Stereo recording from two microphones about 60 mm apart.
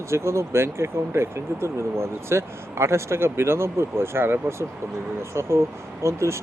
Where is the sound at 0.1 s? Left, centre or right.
Right.